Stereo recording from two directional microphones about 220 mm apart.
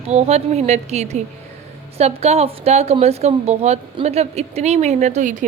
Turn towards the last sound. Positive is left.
turn(degrees=-35)  # may be behind; listen again after turning